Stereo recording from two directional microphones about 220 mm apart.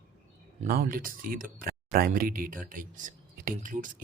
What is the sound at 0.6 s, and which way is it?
Speech, 40° right (ahead or behind).